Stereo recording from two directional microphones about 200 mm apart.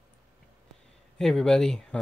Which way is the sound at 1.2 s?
5° left (ahead or behind).